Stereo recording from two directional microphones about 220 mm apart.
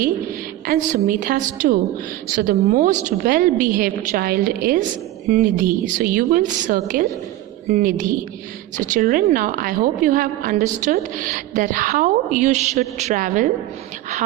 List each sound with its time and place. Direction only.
0.6 s a woman's voice: 40° right (ahead or behind)